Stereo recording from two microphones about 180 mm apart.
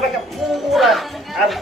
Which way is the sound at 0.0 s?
Centre (ahead or behind).